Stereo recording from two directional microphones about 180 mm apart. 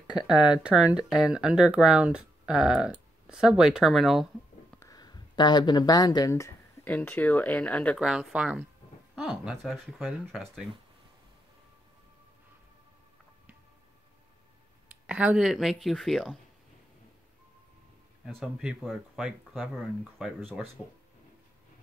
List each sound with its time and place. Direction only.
0.0 s speech: 5° right (ahead or behind)
4.7 s speech: 20° left (ahead or behind)
8.0 s speech: 5° right (ahead or behind)
15.0 s speech: 5° right (ahead or behind)
18.2 s speech: centre (ahead or behind)